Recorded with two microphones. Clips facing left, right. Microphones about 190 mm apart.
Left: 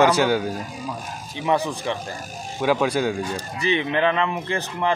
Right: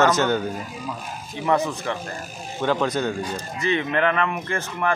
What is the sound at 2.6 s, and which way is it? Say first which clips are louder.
Speech: left 2 dB; 10° left (ahead or behind).